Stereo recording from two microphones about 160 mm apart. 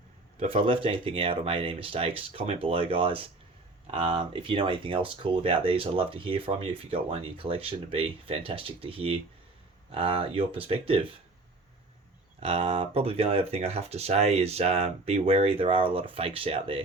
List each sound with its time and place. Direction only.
0.3 s speech: 35° right (ahead or behind)
12.4 s speech: 35° right (ahead or behind)